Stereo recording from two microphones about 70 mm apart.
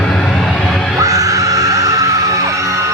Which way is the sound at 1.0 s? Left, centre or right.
Right.